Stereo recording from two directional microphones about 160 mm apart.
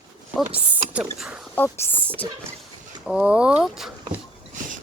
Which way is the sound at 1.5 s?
10° left (ahead or behind).